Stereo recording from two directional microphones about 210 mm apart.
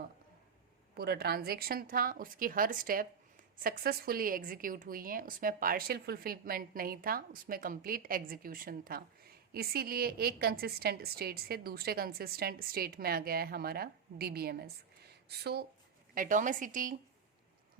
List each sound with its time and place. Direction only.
0.9 s a woman's voice: 50° right (ahead or behind)
16.1 s a woman's voice: 40° right (ahead or behind)